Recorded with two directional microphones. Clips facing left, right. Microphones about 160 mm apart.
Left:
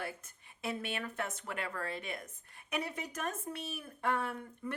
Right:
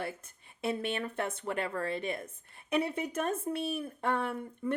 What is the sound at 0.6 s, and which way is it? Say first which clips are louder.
A woman's voice: right 5 dB; 30° right (ahead or behind).